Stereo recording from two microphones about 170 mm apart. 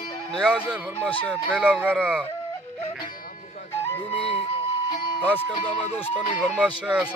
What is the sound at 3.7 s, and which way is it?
Music, 15° left (ahead or behind).